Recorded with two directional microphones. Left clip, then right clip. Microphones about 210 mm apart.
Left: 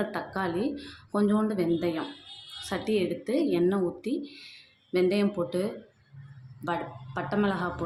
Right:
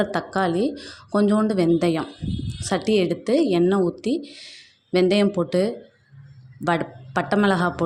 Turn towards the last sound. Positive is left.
turn(degrees=-40)  # may be behind; listen again after turning